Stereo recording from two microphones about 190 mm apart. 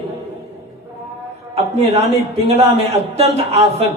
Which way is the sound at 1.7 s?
35° right (ahead or behind).